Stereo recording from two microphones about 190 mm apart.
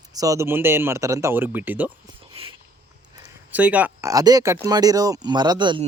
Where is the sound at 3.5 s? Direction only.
10° right (ahead or behind); by 5.8 s 25° right (ahead or behind).